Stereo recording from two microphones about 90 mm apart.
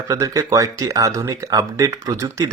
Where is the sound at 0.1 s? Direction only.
40° right (ahead or behind).